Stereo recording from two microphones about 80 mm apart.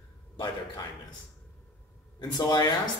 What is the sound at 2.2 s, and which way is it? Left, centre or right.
Speech, left.